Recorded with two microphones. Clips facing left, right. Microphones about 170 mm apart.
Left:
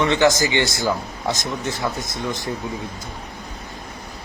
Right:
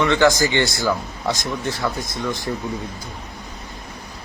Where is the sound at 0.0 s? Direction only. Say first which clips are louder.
Right 1 dB; 20° left (ahead or behind).